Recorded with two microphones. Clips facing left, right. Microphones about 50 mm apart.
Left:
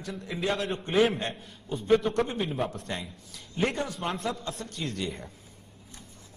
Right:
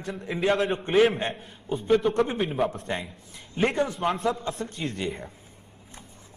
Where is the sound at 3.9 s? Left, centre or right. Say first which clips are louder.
Right 6 dB; centre.